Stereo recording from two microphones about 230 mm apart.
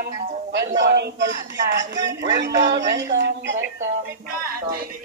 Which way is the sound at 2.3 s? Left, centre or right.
Right.